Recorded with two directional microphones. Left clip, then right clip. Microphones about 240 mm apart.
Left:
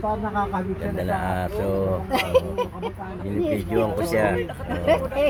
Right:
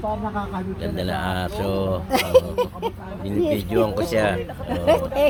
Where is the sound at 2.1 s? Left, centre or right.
Right.